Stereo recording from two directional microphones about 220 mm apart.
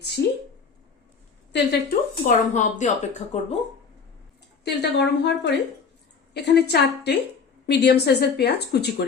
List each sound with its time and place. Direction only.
0.2 s speech: 50° left (ahead or behind)
1.5 s speech: 50° left (ahead or behind)
2.2 s speech: 35° left (ahead or behind)
4.6 s speech: 50° left (ahead or behind)